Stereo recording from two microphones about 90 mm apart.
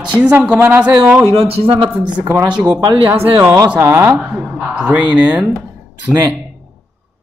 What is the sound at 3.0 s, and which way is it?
Speech, 25° right (ahead or behind).